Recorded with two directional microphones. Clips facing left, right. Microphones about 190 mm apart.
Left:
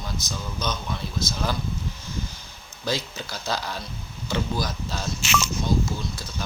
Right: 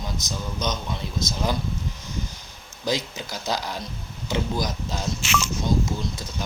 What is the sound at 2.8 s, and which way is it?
Speech, 15° right (ahead or behind).